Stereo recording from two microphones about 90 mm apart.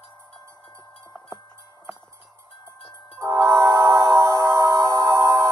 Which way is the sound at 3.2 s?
35° right (ahead or behind).